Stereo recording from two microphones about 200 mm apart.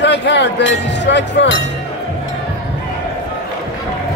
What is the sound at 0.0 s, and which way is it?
Speech, 60° left (ahead or behind).